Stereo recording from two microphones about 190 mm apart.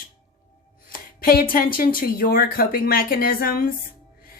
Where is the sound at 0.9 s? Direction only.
50° left (ahead or behind).